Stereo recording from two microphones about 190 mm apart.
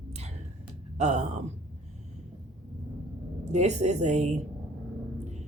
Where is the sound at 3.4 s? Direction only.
35° right (ahead or behind).